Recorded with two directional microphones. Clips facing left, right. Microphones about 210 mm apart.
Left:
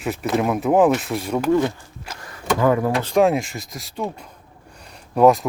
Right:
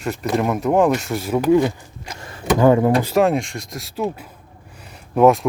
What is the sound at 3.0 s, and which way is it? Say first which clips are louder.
Speech: even; 5° right (ahead or behind).